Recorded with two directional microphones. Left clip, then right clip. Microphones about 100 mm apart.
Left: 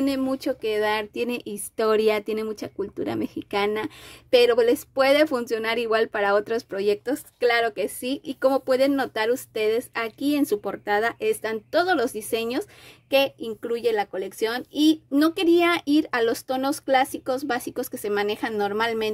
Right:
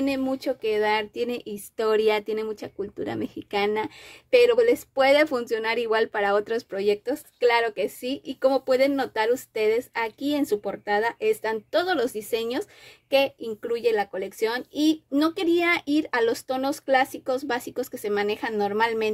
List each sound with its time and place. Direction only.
0.0 s speech: 40° left (ahead or behind)